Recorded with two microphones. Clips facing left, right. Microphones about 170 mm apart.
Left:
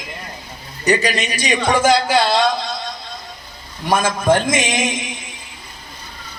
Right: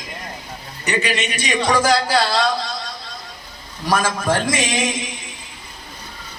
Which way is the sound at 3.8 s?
20° left (ahead or behind).